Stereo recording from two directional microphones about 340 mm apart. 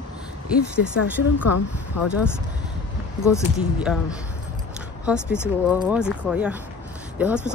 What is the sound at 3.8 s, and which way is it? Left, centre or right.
Speech, centre.